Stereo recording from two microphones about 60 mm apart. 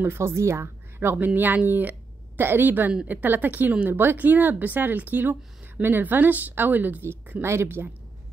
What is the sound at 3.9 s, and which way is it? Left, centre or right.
Speech, right.